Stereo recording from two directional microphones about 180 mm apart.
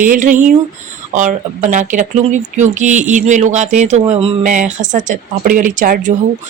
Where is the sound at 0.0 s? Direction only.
50° right (ahead or behind).